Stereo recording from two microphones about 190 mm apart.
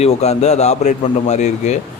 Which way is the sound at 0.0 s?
35° left (ahead or behind).